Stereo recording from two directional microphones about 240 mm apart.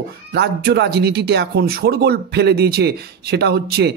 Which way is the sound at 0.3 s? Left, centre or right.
Right.